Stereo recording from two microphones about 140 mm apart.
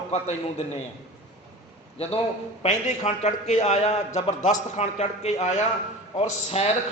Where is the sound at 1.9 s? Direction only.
45° left (ahead or behind).